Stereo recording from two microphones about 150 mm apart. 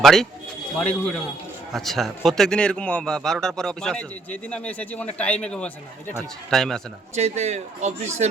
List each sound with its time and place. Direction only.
0.0 s a man's voice: centre (ahead or behind)
7.2 s speech: 45° right (ahead or behind)